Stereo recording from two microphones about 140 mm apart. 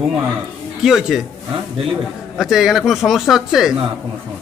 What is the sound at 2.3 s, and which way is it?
Speech, centre (ahead or behind).